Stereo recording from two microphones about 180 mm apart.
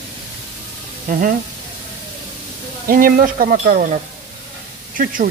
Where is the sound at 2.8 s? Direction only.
50° right (ahead or behind).